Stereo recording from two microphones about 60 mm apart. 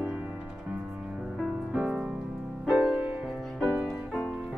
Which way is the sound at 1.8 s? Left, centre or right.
Right.